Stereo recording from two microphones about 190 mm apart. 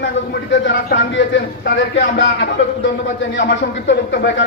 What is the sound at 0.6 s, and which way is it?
Speech, 70° left (ahead or behind).